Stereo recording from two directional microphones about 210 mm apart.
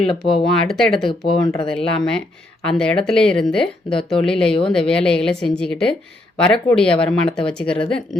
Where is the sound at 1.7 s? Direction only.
5° left (ahead or behind).